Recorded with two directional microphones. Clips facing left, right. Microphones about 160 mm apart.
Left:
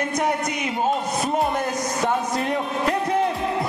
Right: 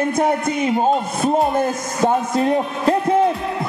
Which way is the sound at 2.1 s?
30° right (ahead or behind).